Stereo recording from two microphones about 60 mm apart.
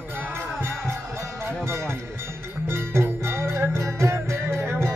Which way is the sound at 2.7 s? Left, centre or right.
Right.